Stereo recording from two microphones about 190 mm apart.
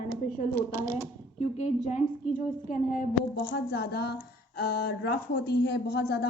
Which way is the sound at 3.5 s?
60° left (ahead or behind).